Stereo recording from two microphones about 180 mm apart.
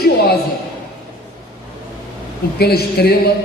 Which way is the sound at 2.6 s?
60° left (ahead or behind).